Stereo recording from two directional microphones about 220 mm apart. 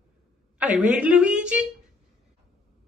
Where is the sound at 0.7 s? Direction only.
5° right (ahead or behind).